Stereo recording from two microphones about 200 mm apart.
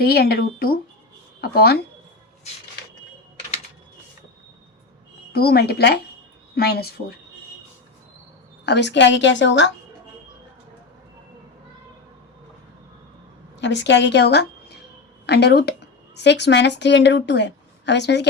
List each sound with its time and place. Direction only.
0.0 s speech: 50° left (ahead or behind)
5.3 s speech: 50° left (ahead or behind)
8.6 s a woman's voice: 60° left (ahead or behind)
13.6 s a woman's voice: 65° left (ahead or behind)